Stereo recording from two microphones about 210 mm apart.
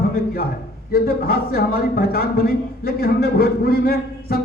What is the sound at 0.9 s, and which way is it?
Speech, 45° left (ahead or behind).